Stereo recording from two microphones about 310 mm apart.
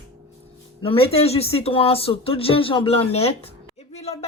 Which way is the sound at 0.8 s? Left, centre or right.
Centre.